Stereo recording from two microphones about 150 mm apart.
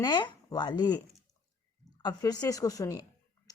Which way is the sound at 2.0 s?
25° left (ahead or behind).